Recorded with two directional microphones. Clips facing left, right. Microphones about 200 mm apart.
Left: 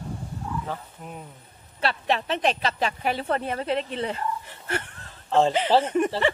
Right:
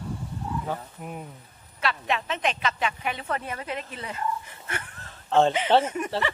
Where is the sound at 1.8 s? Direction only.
35° left (ahead or behind).